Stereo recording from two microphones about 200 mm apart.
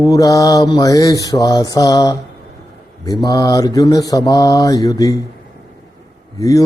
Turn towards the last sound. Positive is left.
turn(degrees=15)  # may be behind; listen again after turning